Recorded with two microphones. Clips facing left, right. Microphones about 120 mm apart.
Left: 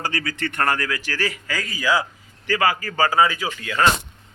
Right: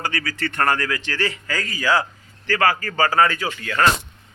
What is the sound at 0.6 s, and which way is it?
Speech, 5° left (ahead or behind).